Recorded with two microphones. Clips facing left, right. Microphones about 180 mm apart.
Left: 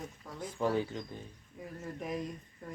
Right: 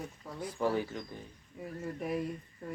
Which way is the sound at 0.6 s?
20° left (ahead or behind).